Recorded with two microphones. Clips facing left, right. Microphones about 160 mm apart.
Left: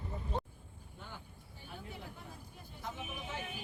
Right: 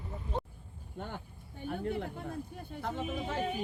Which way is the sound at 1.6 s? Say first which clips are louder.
Right 13 dB; 55° right (ahead or behind).